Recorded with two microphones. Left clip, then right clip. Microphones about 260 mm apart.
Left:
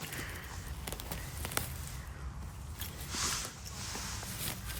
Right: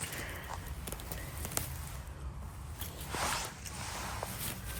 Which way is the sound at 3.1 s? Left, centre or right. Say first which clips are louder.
Right 2 dB; right.